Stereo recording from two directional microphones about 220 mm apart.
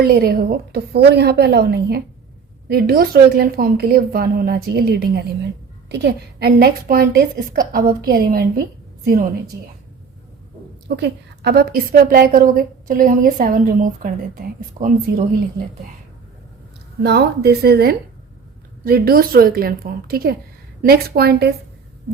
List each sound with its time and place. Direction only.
0.0 s a woman's voice: 45° right (ahead or behind)
10.8 s a woman's voice: 50° right (ahead or behind)
17.0 s a woman's voice: 50° right (ahead or behind)